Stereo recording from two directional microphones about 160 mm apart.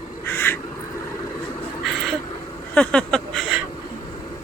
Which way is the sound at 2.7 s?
5° left (ahead or behind).